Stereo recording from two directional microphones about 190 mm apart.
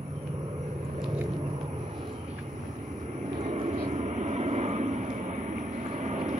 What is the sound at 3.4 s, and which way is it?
Vehicle, 35° right (ahead or behind).